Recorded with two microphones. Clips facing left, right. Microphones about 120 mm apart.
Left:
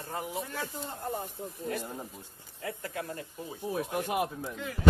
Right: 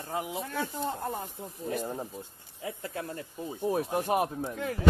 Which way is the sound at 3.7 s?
35° right (ahead or behind).